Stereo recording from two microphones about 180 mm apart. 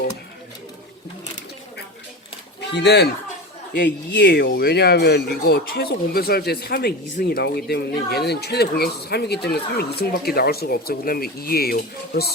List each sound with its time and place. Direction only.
2.6 s speech: 70° left (ahead or behind)